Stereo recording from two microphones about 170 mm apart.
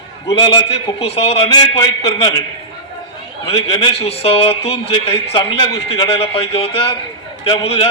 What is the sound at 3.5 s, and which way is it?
A man's voice, 30° left (ahead or behind).